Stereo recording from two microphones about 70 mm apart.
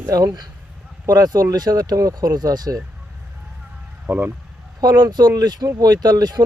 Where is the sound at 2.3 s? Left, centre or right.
Right.